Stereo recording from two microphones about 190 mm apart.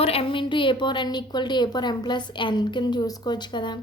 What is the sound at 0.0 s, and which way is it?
A woman's voice, 30° left (ahead or behind).